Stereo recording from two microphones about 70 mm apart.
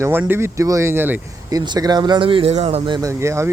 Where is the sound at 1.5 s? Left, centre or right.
Right.